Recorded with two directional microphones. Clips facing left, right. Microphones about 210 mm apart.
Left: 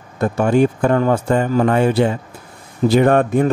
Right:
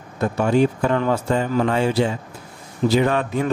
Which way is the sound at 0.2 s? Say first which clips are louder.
Left 3 dB; 50° left (ahead or behind).